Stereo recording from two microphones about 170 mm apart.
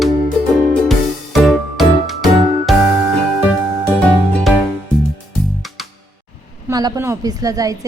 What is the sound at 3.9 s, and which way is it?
Music, 5° left (ahead or behind).